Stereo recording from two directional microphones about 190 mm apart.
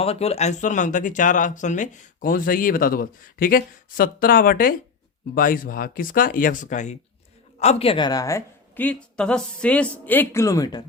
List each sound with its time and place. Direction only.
0.0 s a woman's voice: 30° left (ahead or behind)